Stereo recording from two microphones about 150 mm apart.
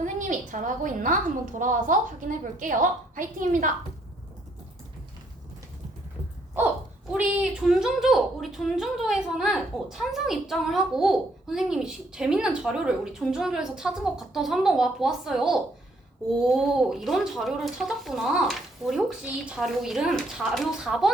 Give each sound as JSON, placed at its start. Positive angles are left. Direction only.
{"t": 0.0, "sound": "a woman's voice", "side_deg": -60}
{"t": 7.1, "sound": "a woman's voice", "side_deg": -5}